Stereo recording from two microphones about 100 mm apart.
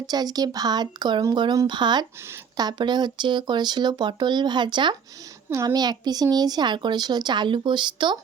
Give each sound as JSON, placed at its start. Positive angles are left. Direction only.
{"t": 0.1, "sound": "speech", "side_deg": -40}
{"t": 5.5, "sound": "a child's voice", "side_deg": -40}